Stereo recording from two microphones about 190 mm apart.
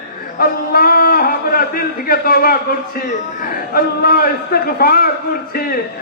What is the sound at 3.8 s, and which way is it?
A man's voice, 55° left (ahead or behind).